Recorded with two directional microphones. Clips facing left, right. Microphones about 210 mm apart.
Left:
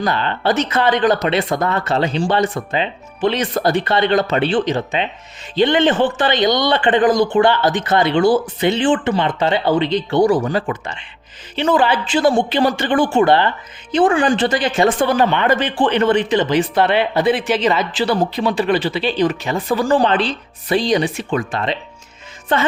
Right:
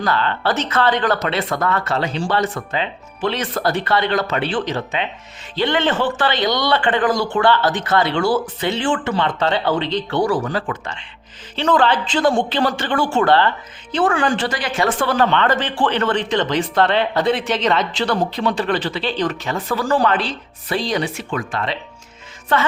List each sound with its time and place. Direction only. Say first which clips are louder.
0.0 s speech: left 1 dB; 15° left (ahead or behind)
22.5 s music: left 1 dB; 20° left (ahead or behind)